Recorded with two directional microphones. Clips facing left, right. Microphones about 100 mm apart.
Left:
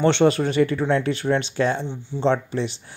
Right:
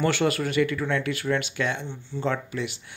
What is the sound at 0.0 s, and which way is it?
Speech, 25° left (ahead or behind).